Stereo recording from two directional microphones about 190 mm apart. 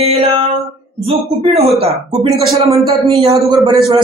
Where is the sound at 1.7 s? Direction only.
30° right (ahead or behind).